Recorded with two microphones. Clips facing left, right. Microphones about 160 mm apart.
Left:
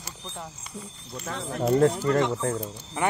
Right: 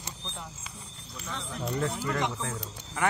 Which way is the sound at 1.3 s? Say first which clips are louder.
Left 10 dB; 50° left (ahead or behind).